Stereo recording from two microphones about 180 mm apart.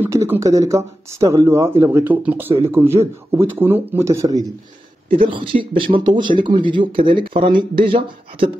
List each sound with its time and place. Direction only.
0.0 s a man's voice: 15° right (ahead or behind)
5.3 s speech: 30° right (ahead or behind)